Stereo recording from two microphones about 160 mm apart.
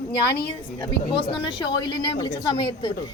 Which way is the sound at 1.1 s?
30° left (ahead or behind).